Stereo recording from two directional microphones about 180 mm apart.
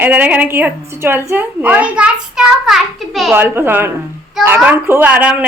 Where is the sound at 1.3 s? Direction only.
10° right (ahead or behind).